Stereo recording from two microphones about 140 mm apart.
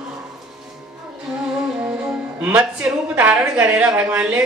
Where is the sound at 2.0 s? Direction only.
10° right (ahead or behind).